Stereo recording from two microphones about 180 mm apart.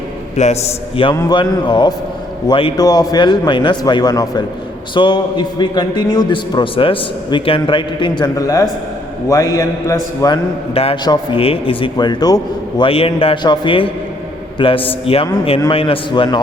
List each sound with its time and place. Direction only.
0.3 s a man's voice: 40° left (ahead or behind)